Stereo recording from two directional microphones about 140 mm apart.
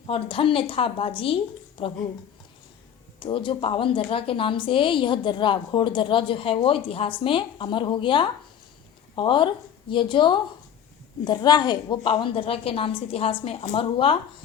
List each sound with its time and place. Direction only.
0.1 s a woman's voice: 40° left (ahead or behind)
3.2 s a woman's voice: 35° left (ahead or behind)